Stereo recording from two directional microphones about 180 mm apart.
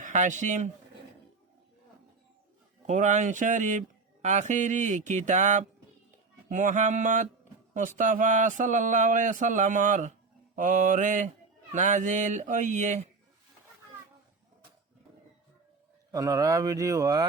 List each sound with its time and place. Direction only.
0.0 s speech: 45° right (ahead or behind)
2.8 s speech: 45° right (ahead or behind)
16.1 s a man's voice: 20° right (ahead or behind)